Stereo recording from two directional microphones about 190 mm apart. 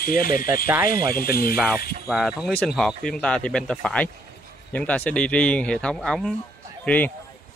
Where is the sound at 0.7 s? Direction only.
15° right (ahead or behind).